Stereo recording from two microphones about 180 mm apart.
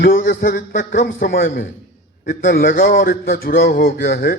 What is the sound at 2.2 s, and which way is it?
A man's voice, 45° left (ahead or behind).